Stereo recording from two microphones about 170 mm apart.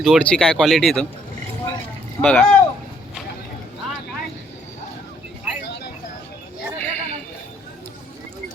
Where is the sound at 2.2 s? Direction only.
5° left (ahead or behind).